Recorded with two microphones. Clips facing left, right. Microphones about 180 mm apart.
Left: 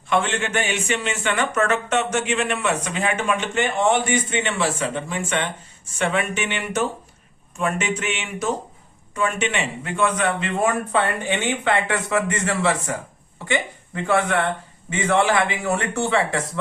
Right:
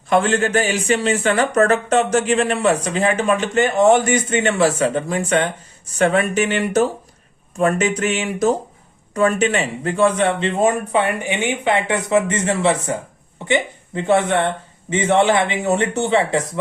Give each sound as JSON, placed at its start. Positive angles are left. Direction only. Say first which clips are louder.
{"t": 0.1, "sound": "a man's voice", "louder": "right 6 dB", "side_deg": -40}